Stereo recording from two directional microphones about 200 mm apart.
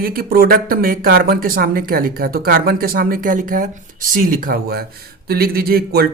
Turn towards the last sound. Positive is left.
turn(degrees=-50)  # may be behind; listen again after turning